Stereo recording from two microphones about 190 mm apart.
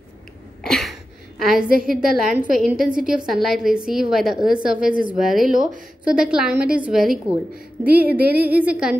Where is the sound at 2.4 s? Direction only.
45° right (ahead or behind).